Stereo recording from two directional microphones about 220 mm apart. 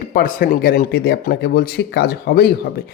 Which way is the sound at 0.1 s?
40° left (ahead or behind).